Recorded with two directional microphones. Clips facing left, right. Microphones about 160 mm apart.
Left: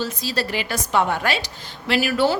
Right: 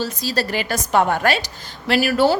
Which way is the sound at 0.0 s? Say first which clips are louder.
Right 2 dB; 40° right (ahead or behind).